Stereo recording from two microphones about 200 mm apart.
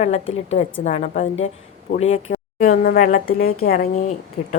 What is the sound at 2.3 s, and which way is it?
Speech, 45° left (ahead or behind).